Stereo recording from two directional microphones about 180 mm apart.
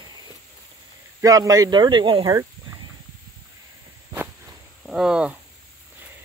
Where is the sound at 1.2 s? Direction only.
20° right (ahead or behind).